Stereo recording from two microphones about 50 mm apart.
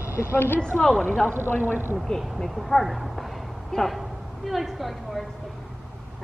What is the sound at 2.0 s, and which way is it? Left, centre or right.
Speech, centre.